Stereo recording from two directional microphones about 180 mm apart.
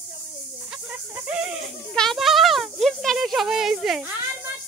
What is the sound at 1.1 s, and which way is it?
Speech, 10° right (ahead or behind).